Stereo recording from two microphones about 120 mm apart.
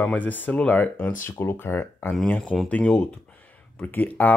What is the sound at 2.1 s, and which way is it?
Speech, 5° left (ahead or behind).